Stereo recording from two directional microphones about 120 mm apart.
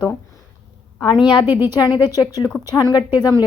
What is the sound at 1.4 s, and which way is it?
Speech, 15° right (ahead or behind).